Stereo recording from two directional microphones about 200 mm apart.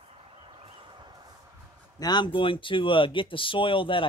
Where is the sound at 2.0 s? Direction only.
20° left (ahead or behind).